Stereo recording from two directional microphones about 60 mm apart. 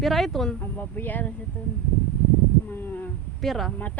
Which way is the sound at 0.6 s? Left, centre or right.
Left.